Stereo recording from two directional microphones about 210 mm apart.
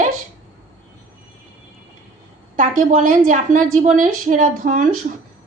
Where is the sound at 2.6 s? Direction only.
40° right (ahead or behind).